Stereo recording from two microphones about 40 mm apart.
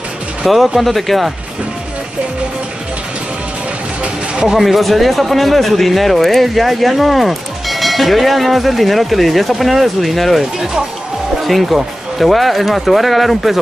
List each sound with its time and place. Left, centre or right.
0.5 s speech: centre
4.0 s a sound: right
4.6 s speech: centre
11.4 s speech: centre